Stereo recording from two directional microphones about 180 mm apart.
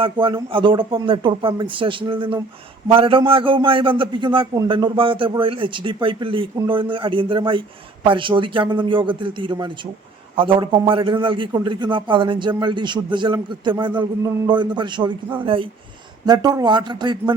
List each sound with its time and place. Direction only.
0.0 s a man's voice: 30° right (ahead or behind)